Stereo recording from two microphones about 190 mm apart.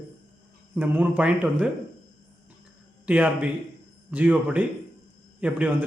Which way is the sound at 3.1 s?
5° right (ahead or behind).